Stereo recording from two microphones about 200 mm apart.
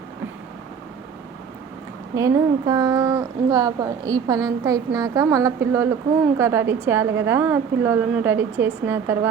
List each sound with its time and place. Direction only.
2.1 s a woman's voice: 15° right (ahead or behind)